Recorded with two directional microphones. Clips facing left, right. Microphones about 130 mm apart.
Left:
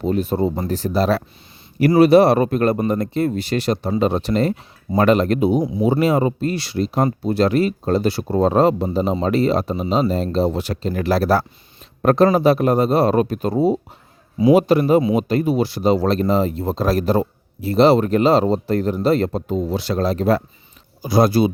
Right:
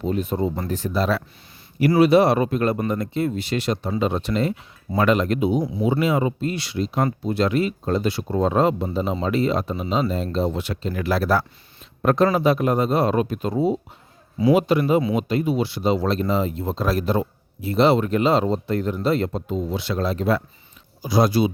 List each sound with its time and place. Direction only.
0.0 s speech: 35° left (ahead or behind)